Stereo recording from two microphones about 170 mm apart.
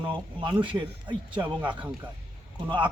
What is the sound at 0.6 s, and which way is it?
A man's voice, 30° right (ahead or behind).